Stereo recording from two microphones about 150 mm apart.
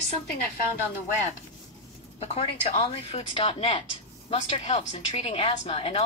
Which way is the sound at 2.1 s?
40° left (ahead or behind).